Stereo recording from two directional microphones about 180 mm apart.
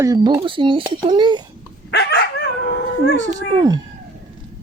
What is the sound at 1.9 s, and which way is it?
Dog, 65° left (ahead or behind).